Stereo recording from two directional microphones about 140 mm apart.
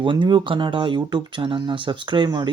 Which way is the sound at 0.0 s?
35° right (ahead or behind).